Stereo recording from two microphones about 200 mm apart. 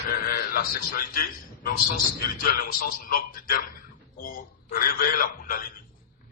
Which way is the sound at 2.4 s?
45° left (ahead or behind).